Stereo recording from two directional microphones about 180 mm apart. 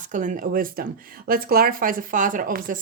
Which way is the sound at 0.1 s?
45° right (ahead or behind).